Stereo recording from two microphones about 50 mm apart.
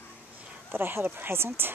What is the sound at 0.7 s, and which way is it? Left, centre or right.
Speech, right.